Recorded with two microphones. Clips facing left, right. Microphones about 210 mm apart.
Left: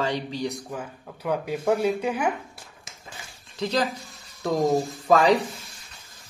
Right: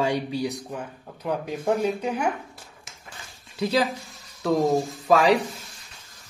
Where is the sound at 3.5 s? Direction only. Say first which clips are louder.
Right 2 dB; 10° right (ahead or behind).